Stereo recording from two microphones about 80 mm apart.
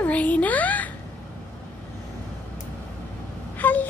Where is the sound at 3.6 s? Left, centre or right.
Left.